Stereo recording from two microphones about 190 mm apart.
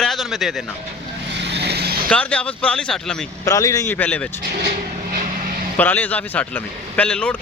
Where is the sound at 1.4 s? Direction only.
65° right (ahead or behind).